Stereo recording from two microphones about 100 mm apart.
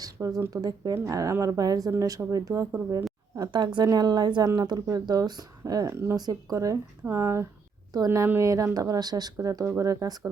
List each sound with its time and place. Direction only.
0.0 s speech: 35° right (ahead or behind)
3.5 s a woman's voice: 50° right (ahead or behind); by 6.1 s 25° right (ahead or behind)
6.1 s speech: 40° right (ahead or behind)